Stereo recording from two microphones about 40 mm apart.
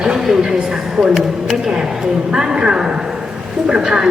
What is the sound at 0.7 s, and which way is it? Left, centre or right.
A woman's voice, centre.